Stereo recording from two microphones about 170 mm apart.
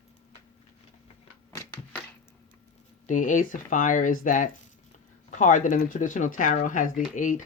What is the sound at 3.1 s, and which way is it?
Speech, 50° left (ahead or behind).